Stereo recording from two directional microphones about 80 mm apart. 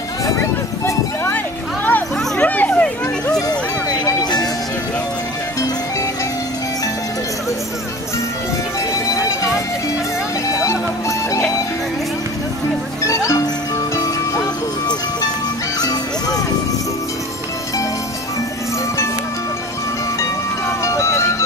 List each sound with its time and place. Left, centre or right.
0.4 s music: left
1.9 s a sound: left
4.0 s music: left
8.9 s music: left
10.5 s music: left
13.0 s music: left
15.8 s music: left
20.8 s music: left